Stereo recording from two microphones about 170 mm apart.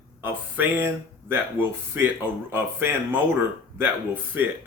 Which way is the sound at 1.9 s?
10° right (ahead or behind).